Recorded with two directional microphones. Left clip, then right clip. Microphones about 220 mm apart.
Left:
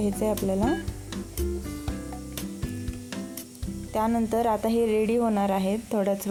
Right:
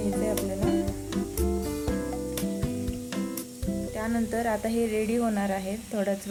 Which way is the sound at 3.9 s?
30° left (ahead or behind).